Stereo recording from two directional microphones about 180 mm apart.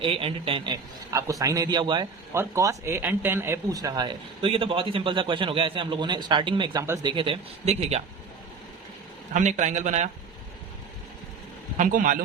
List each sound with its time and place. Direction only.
0.0 s speech: 30° right (ahead or behind)
9.3 s speech: 40° right (ahead or behind)
11.8 s a man's voice: 45° right (ahead or behind)